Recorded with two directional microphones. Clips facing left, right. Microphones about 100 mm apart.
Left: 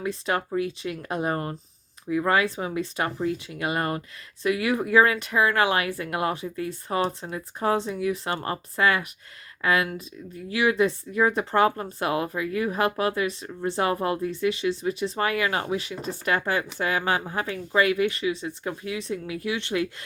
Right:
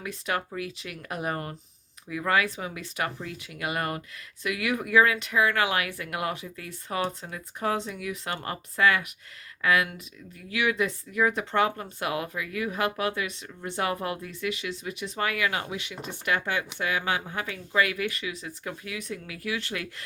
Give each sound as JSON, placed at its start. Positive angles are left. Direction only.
{"t": 0.0, "sound": "speech", "side_deg": 30}